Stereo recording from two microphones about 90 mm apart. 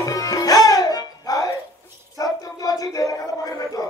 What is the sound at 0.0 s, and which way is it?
Music, 40° left (ahead or behind).